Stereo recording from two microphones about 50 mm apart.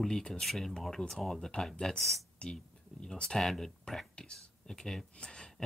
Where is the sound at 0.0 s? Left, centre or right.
Centre.